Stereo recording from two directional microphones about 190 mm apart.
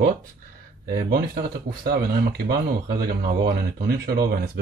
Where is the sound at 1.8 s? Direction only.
55° right (ahead or behind).